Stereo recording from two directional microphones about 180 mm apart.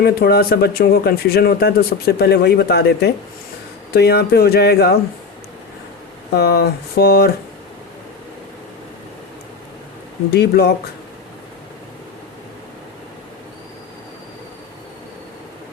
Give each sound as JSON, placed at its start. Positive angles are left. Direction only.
{"t": 0.0, "sound": "speech", "side_deg": 60}
{"t": 6.3, "sound": "speech", "side_deg": 65}
{"t": 10.3, "sound": "speech", "side_deg": 65}